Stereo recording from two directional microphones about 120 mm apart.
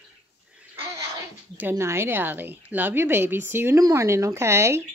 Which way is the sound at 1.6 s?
20° right (ahead or behind).